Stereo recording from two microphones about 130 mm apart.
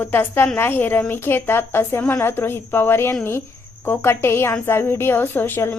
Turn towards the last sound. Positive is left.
turn(degrees=15)  # may be behind; listen again after turning